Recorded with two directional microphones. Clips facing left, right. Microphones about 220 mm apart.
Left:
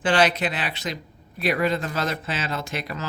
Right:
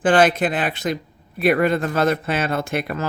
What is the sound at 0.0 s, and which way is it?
Speech, 50° right (ahead or behind).